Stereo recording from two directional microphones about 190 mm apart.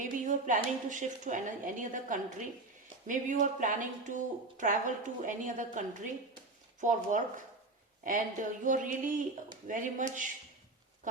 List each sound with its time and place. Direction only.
0.0 s speech: 45° right (ahead or behind)
8.6 s speech: 45° right (ahead or behind)